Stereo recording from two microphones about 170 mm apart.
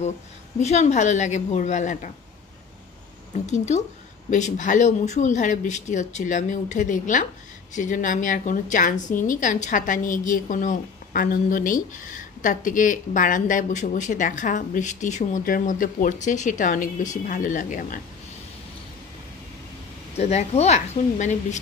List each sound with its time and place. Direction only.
0.6 s a woman's voice: 40° left (ahead or behind)
3.4 s a woman's voice: 40° left (ahead or behind)
20.2 s a woman's voice: 40° left (ahead or behind)